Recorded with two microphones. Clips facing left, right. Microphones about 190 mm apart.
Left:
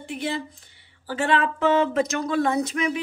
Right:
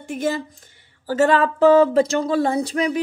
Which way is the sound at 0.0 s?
45° right (ahead or behind).